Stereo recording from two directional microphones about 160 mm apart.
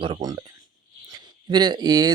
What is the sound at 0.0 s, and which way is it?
Speech, 25° right (ahead or behind).